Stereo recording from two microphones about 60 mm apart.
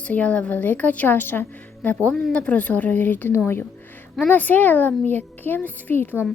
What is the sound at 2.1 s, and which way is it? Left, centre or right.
A woman's voice, centre.